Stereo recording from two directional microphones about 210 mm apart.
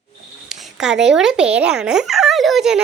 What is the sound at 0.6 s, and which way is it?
Speech, centre (ahead or behind).